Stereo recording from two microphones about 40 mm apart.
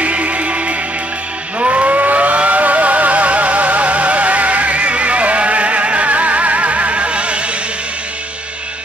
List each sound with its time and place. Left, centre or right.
0.0 s music: right